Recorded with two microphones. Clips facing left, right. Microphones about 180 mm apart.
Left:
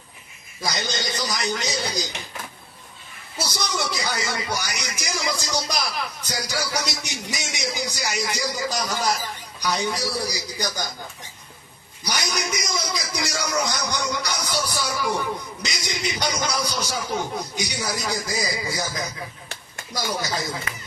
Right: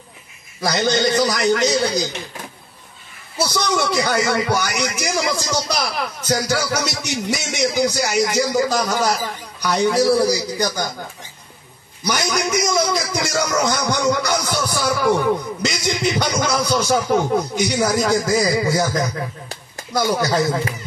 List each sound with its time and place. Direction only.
0.6 s speech: 60° right (ahead or behind)
3.4 s speech: 60° right (ahead or behind)
12.0 s speech: 55° right (ahead or behind)